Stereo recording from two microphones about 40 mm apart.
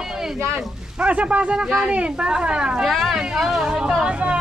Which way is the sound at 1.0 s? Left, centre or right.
Right.